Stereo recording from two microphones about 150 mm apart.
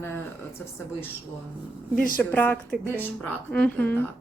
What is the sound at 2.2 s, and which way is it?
A woman's voice, 10° left (ahead or behind).